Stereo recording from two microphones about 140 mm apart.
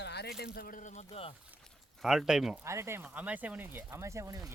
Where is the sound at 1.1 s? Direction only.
40° left (ahead or behind).